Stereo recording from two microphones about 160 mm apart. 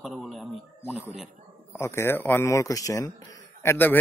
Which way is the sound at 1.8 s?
15° left (ahead or behind).